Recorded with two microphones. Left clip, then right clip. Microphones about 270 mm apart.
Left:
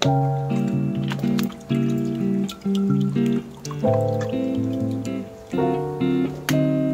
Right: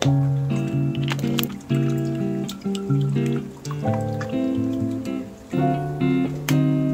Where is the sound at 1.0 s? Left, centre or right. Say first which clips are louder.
Even; right.